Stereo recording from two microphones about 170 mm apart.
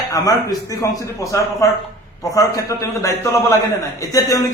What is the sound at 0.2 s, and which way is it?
A man's voice, 20° left (ahead or behind).